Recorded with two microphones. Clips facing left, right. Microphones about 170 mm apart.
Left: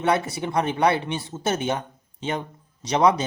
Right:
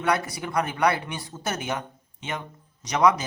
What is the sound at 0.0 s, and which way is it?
Speech, 25° left (ahead or behind).